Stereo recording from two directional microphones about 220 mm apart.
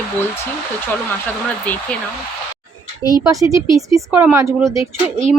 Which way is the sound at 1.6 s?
5° left (ahead or behind).